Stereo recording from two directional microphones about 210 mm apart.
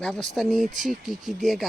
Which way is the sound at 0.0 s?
Centre (ahead or behind).